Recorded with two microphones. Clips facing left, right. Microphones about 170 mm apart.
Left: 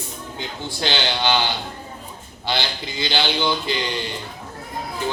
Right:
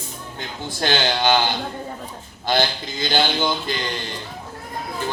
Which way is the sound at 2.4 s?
50° right (ahead or behind).